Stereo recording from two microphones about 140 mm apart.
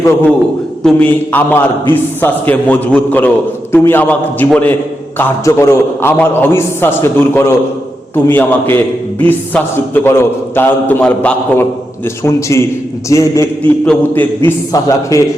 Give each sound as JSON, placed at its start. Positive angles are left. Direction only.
{"t": 0.8, "sound": "a man's voice", "side_deg": 5}
{"t": 5.5, "sound": "a man's voice", "side_deg": 20}
{"t": 13.8, "sound": "a man's voice", "side_deg": 10}